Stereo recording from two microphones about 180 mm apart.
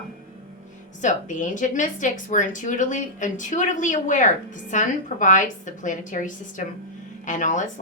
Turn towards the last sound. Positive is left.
turn(degrees=45)  # may be behind; listen again after turning